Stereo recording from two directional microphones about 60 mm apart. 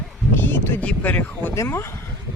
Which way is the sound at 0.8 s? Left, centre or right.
Left.